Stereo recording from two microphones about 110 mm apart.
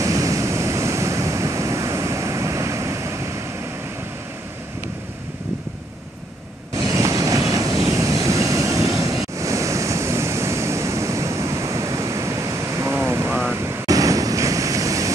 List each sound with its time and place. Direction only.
0.0 s waves: 30° right (ahead or behind)
6.8 s vehicle: 30° right (ahead or behind)
13.8 s waves: 30° right (ahead or behind)